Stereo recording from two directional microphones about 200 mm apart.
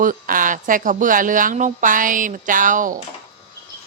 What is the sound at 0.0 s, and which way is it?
A woman's voice, 40° right (ahead or behind).